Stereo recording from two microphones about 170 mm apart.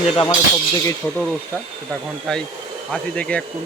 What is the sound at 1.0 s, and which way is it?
Speech, 10° left (ahead or behind).